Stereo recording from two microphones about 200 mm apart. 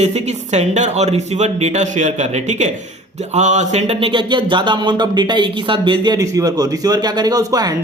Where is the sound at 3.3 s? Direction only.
35° right (ahead or behind).